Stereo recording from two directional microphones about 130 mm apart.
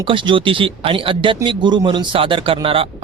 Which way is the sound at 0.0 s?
40° right (ahead or behind).